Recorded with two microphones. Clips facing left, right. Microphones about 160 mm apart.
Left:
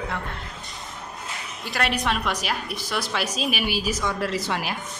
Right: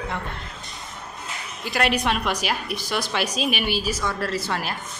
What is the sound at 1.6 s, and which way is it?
A woman's voice, 5° right (ahead or behind).